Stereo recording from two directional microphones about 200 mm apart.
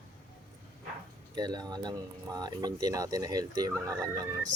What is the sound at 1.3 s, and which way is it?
Speech, 20° right (ahead or behind).